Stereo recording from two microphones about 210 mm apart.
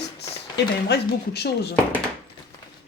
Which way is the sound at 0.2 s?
50° left (ahead or behind).